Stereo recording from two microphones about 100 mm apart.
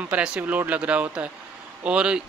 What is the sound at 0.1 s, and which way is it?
Speech, 10° right (ahead or behind).